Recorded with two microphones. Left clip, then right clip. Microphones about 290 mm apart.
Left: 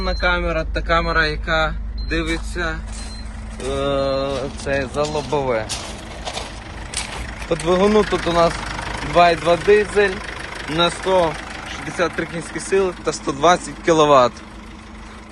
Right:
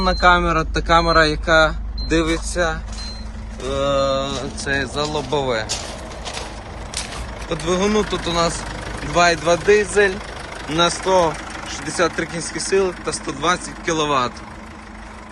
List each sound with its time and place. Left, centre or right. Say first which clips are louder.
0.0 s speech: right 5 dB; centre
3.7 s speech: right 2 dB; centre
7.7 s speech: left 3 dB; centre